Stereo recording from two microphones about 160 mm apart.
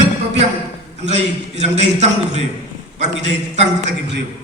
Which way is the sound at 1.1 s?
45° right (ahead or behind).